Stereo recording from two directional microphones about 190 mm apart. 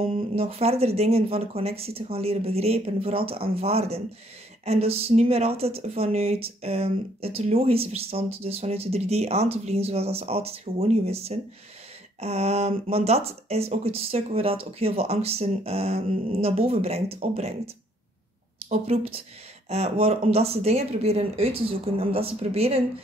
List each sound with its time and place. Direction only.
0.0 s speech: 30° right (ahead or behind)
18.7 s speech: 30° right (ahead or behind)